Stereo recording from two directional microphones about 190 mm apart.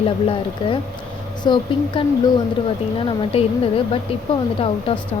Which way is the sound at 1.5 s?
25° left (ahead or behind).